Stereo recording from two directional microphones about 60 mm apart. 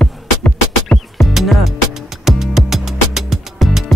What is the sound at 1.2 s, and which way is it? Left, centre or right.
Music, centre.